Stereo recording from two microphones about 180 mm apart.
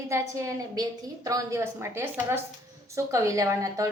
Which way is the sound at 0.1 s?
20° right (ahead or behind).